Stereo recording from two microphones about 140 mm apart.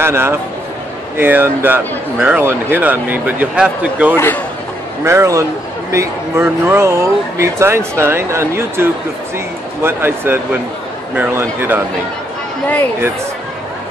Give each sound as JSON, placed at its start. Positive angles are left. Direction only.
{"t": 0.0, "sound": "speech", "side_deg": -15}
{"t": 5.0, "sound": "a man's voice", "side_deg": -20}
{"t": 9.8, "sound": "speech", "side_deg": -15}